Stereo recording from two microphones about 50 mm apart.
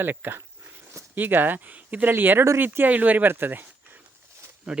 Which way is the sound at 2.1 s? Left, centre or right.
Right.